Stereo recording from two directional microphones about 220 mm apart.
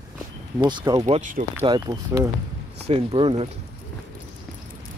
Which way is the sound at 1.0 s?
35° right (ahead or behind).